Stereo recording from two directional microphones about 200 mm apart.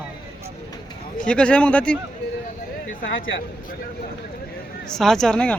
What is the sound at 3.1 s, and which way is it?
Speech, 70° left (ahead or behind).